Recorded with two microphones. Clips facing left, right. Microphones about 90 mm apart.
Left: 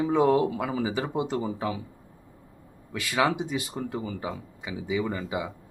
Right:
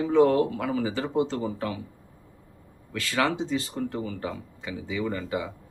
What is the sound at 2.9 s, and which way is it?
Speech, 15° left (ahead or behind).